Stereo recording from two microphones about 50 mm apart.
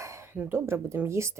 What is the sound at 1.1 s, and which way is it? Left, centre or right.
Speech, right.